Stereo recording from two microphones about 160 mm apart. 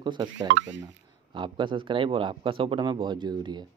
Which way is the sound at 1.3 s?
30° right (ahead or behind).